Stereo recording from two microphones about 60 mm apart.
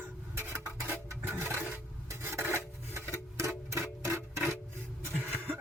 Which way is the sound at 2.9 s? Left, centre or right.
Right.